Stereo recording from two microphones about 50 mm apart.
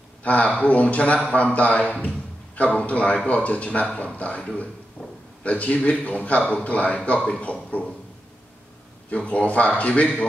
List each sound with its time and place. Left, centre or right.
0.2 s a man's voice: left
9.1 s a man's voice: left